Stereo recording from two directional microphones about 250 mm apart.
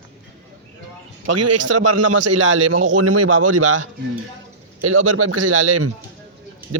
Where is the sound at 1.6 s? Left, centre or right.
Right.